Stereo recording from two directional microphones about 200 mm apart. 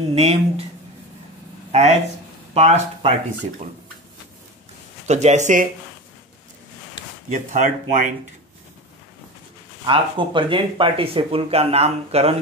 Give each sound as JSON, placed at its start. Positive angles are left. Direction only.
{"t": 0.1, "sound": "speech", "side_deg": -30}
{"t": 1.7, "sound": "speech", "side_deg": -35}
{"t": 5.0, "sound": "speech", "side_deg": -35}
{"t": 7.2, "sound": "speech", "side_deg": -40}
{"t": 9.8, "sound": "speech", "side_deg": -25}